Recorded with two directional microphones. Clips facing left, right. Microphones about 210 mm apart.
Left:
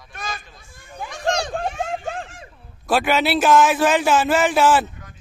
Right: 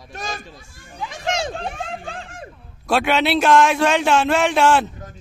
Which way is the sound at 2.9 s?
Centre (ahead or behind).